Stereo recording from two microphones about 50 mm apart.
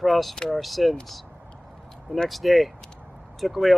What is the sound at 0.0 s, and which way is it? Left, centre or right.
Speech, centre.